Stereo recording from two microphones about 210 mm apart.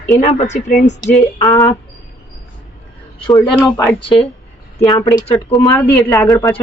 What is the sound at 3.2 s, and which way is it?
Speech, 20° left (ahead or behind).